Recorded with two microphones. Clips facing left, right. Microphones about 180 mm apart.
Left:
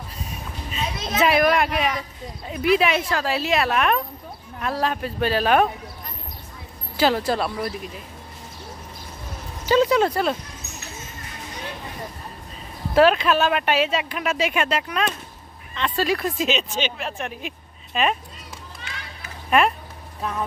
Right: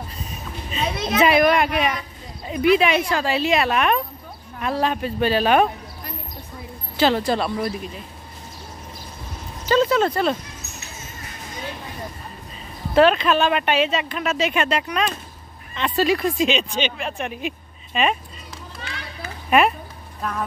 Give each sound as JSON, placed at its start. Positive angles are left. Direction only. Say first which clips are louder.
{"t": 0.9, "sound": "speech", "louder": "right 5 dB", "side_deg": -60}
{"t": 1.2, "sound": "speech", "louder": "right 2 dB", "side_deg": 0}
{"t": 7.0, "sound": "speech", "louder": "right 1 dB", "side_deg": 5}
{"t": 9.7, "sound": "speech", "louder": "even", "side_deg": 10}
{"t": 12.9, "sound": "speech", "louder": "right 1 dB", "side_deg": 5}
{"t": 20.2, "sound": "speech", "louder": "even", "side_deg": 10}